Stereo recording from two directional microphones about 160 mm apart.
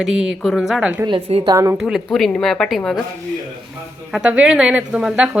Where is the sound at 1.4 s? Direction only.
20° right (ahead or behind).